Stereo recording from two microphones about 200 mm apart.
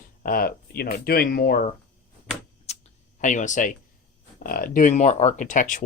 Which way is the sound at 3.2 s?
40° left (ahead or behind).